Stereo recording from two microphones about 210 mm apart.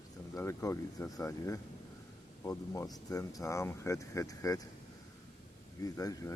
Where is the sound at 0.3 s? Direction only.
15° left (ahead or behind).